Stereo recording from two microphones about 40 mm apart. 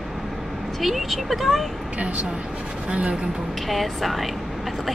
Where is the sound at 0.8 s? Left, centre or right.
Centre.